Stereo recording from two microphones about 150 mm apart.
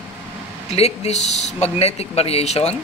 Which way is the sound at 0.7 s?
45° left (ahead or behind).